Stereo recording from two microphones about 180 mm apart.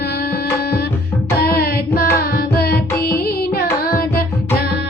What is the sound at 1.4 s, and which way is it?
Carnatic music, 55° left (ahead or behind).